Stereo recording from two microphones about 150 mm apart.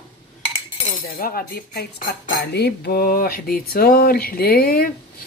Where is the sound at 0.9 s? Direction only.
75° left (ahead or behind).